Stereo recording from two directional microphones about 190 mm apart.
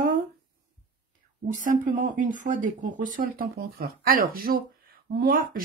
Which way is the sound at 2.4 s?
45° right (ahead or behind).